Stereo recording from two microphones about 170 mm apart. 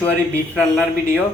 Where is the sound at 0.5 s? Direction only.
5° left (ahead or behind).